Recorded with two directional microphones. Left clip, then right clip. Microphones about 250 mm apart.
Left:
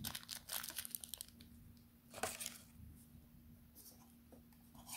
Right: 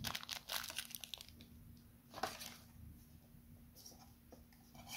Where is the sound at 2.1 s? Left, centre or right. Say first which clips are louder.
Right 1 dB; left.